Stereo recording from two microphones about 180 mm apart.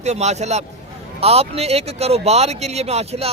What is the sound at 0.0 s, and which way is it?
Speech, 40° right (ahead or behind).